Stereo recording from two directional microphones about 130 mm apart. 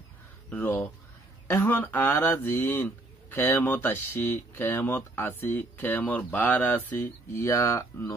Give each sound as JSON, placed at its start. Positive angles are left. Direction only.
{"t": 0.5, "sound": "speech", "side_deg": 15}